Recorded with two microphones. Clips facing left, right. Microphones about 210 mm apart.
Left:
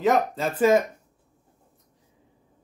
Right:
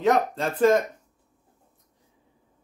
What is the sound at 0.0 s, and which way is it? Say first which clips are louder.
Speech: even; centre (ahead or behind).